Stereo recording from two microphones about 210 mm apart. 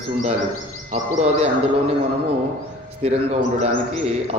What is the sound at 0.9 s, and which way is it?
Speech, 30° right (ahead or behind).